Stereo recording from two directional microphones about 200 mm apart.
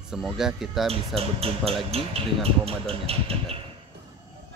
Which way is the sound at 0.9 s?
30° right (ahead or behind).